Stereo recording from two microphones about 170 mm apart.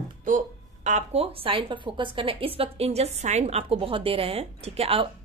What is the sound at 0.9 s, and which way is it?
A woman's voice, 40° right (ahead or behind).